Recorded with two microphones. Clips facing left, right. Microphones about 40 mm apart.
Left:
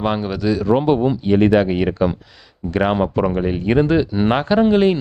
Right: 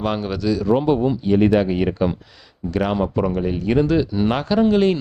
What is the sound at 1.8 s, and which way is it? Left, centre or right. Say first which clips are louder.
Speech: left 2 dB; left.